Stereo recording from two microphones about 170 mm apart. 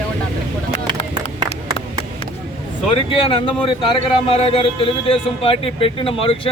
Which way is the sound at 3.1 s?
30° left (ahead or behind).